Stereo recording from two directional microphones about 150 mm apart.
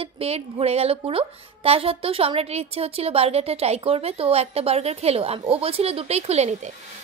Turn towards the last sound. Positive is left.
turn(degrees=-50)  # may be behind; listen again after turning